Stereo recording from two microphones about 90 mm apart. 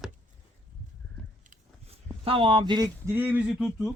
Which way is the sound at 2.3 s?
80° right.